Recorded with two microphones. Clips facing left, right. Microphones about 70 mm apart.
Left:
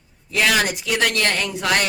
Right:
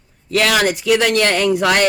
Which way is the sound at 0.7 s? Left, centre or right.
Right.